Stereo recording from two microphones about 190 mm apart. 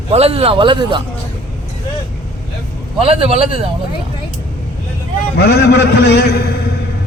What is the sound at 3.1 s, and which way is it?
Speech, 30° right (ahead or behind).